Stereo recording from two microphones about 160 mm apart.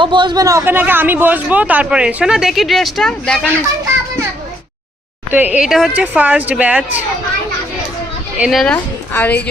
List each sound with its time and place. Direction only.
0.0 s a man's voice: 30° right (ahead or behind); by 3.5 s 5° left (ahead or behind)
5.3 s a man's voice: 10° right (ahead or behind)
8.4 s a woman's voice: centre (ahead or behind)